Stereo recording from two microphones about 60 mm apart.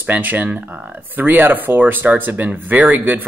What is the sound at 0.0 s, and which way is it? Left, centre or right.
Speech, right.